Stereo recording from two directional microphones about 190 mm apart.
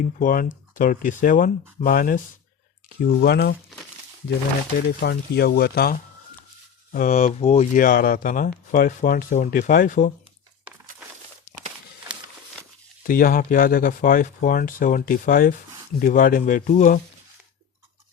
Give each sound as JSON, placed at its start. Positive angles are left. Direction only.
{"t": 0.2, "sound": "speech", "side_deg": 45}
{"t": 4.9, "sound": "speech", "side_deg": 60}
{"t": 6.9, "sound": "speech", "side_deg": 45}
{"t": 13.0, "sound": "speech", "side_deg": 50}